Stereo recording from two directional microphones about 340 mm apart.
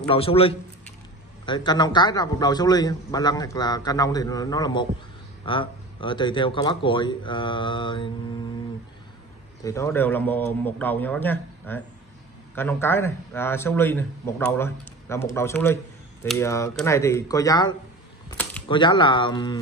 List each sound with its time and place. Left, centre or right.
0.1 s a man's voice: centre
9.6 s a man's voice: centre